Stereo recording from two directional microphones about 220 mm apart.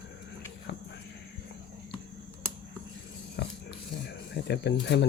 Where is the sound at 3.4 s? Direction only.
50° left (ahead or behind).